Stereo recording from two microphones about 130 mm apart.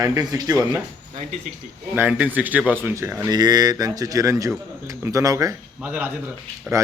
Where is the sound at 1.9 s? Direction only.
10° right (ahead or behind); by 5.5 s 25° right (ahead or behind).